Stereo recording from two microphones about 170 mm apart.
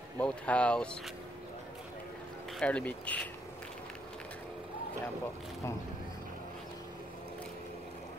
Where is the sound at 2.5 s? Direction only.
5° left (ahead or behind).